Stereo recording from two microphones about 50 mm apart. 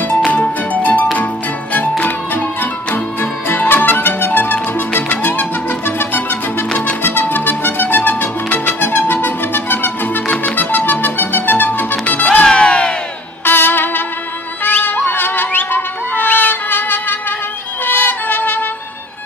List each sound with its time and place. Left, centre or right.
0.1 s music: left
12.4 s crowd: left
13.5 s music: left